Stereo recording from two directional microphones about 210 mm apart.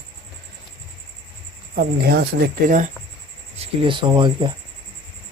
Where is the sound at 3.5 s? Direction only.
25° right (ahead or behind).